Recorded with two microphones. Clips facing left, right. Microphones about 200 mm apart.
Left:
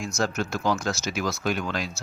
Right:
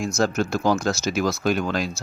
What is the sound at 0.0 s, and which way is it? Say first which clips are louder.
Speech: right 5 dB; 40° right (ahead or behind).